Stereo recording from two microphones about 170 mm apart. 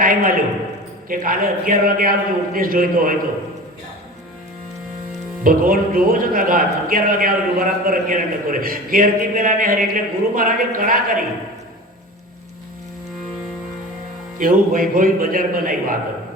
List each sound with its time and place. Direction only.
0.0 s a man's voice: 55° right (ahead or behind)
5.4 s speech: 55° right (ahead or behind)
14.3 s speech: 55° right (ahead or behind)